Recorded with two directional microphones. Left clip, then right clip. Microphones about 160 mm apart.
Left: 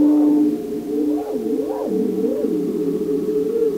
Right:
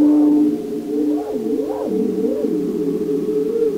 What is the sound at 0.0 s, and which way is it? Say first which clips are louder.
Music: right 1 dB; 45° left (ahead or behind).